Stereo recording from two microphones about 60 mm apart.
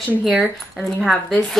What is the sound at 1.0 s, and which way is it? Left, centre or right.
Speech, centre.